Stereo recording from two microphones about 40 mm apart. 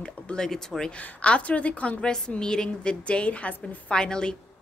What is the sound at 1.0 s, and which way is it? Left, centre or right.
Speech, left.